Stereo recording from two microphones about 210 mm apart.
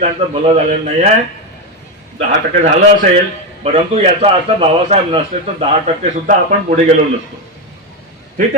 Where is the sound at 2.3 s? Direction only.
35° right (ahead or behind).